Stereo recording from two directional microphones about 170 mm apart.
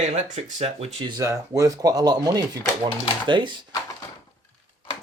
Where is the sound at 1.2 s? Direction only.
20° right (ahead or behind).